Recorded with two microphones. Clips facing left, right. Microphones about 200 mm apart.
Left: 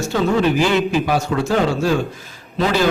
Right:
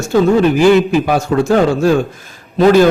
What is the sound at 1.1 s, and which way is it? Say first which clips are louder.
Speech: right 6 dB; 50° right (ahead or behind).